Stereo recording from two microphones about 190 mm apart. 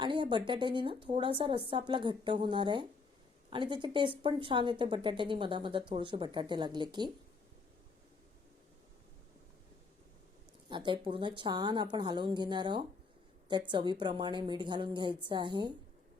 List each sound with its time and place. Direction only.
0.0 s speech: 25° right (ahead or behind)
10.7 s speech: 25° right (ahead or behind)